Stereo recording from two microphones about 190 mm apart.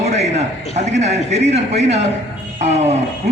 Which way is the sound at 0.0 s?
35° right (ahead or behind).